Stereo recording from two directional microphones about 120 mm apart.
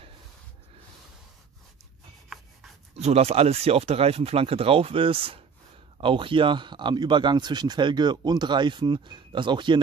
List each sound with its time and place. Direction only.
2.3 s rub: centre (ahead or behind)
3.0 s speech: 60° right (ahead or behind); by 9.8 s 40° right (ahead or behind)